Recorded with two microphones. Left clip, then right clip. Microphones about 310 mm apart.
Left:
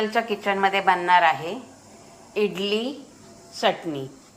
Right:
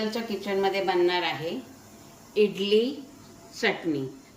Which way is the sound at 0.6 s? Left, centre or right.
Left.